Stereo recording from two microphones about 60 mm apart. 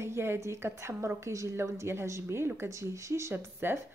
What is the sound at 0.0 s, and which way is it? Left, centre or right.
A woman's voice, right.